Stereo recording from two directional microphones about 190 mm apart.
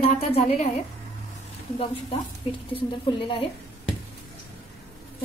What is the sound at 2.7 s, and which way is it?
Speech, 30° left (ahead or behind).